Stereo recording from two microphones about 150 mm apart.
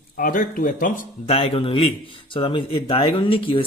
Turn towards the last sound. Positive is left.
turn(degrees=35)  # may be behind; listen again after turning